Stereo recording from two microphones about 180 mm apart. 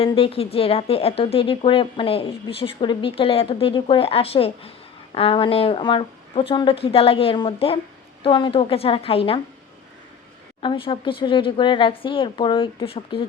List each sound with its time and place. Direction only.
0.0 s speech: 30° left (ahead or behind)
10.6 s speech: 25° left (ahead or behind)